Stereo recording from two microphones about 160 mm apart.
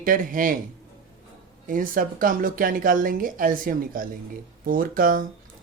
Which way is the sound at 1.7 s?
60° right (ahead or behind).